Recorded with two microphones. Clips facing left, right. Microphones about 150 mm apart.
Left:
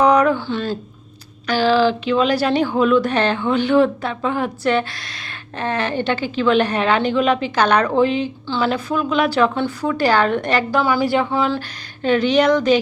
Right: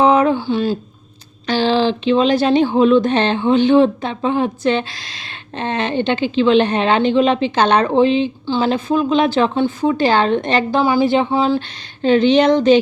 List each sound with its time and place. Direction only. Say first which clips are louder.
0.0 s a sound: right 1 dB; 25° right (ahead or behind)
1.5 s a woman's voice: even; 25° right (ahead or behind)
12.1 s a woman's voice: right 3 dB; 25° right (ahead or behind)